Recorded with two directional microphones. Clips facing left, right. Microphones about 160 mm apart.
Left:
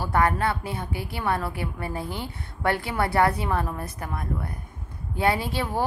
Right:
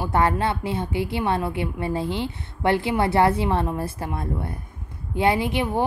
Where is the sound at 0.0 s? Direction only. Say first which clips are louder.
Right 2 dB; 25° right (ahead or behind).